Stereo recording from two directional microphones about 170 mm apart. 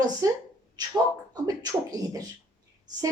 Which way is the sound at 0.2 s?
20° right (ahead or behind).